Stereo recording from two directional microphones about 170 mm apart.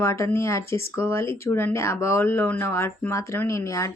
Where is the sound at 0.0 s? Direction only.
15° left (ahead or behind).